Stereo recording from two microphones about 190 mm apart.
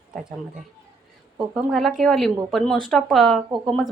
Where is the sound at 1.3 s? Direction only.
Centre (ahead or behind).